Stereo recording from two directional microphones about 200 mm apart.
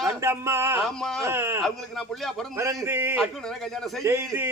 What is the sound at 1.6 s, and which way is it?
Speech, centre (ahead or behind).